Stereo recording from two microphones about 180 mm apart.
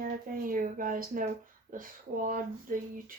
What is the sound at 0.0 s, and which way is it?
Speech, 50° right (ahead or behind).